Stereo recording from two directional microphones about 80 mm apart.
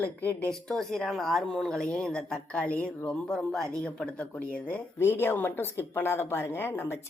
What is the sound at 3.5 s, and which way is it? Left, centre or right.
Speech, centre.